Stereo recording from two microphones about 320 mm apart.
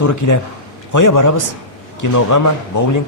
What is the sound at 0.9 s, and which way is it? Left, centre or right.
A man's voice, left.